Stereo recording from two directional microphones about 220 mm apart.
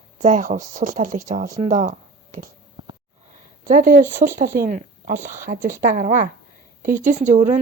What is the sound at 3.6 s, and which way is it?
A woman's voice, 40° right (ahead or behind).